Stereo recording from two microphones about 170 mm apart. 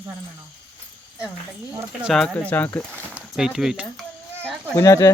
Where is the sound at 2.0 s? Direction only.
Centre (ahead or behind).